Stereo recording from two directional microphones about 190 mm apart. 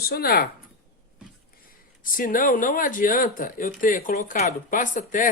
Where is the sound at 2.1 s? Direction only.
45° left (ahead or behind).